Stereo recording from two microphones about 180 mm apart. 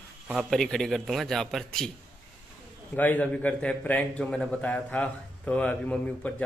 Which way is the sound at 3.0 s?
10° left (ahead or behind).